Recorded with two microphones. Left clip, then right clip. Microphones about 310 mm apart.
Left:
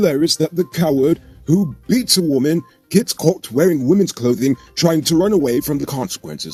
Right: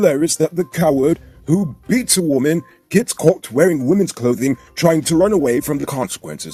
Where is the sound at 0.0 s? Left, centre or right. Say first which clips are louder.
Right 1 dB; centre.